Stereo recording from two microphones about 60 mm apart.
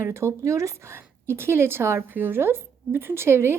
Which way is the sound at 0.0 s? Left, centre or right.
Right.